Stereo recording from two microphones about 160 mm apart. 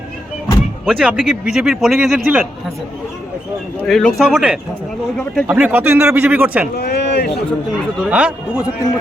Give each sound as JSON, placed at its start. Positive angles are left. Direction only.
{"t": 0.9, "sound": "a man's voice", "side_deg": -5}
{"t": 3.8, "sound": "a man's voice", "side_deg": 5}
{"t": 5.5, "sound": "speech", "side_deg": -10}
{"t": 6.7, "sound": "speech", "side_deg": 90}
{"t": 8.0, "sound": "speech", "side_deg": -5}